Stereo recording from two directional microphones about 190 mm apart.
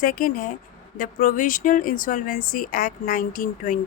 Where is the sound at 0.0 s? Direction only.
45° left (ahead or behind).